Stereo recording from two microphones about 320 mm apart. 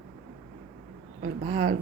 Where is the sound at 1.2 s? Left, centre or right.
Right.